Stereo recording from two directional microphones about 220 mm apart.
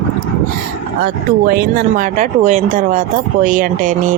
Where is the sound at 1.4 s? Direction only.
45° right (ahead or behind).